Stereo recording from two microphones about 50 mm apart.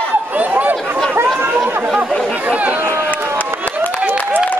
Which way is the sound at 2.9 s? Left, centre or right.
Left.